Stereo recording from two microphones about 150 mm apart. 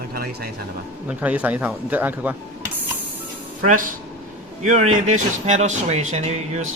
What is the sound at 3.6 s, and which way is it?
Speech, 65° right (ahead or behind).